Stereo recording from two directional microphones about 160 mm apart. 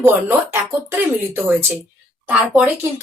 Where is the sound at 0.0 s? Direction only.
15° right (ahead or behind).